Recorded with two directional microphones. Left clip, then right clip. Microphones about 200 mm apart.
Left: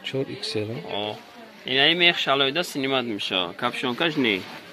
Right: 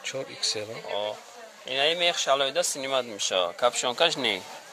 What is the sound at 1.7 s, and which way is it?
Speech, 45° right (ahead or behind).